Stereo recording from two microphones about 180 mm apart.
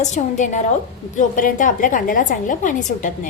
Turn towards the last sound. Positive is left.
turn(degrees=45)  # may be behind; listen again after turning